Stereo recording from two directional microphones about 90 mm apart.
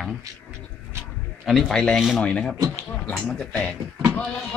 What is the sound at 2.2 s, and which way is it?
Speech, 15° left (ahead or behind).